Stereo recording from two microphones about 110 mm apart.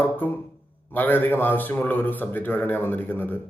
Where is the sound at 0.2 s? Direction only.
15° left (ahead or behind).